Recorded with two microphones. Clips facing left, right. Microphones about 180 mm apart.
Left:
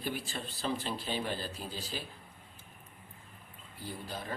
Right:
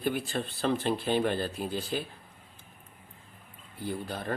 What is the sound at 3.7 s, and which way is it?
Speech, 60° right (ahead or behind).